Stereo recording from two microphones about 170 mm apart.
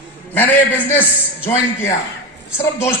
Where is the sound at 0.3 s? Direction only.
10° left (ahead or behind).